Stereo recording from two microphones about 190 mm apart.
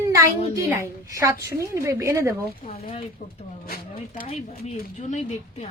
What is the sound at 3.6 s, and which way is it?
Speech, 50° left (ahead or behind).